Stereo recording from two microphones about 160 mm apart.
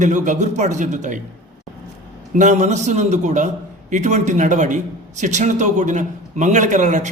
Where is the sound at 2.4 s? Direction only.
50° right (ahead or behind).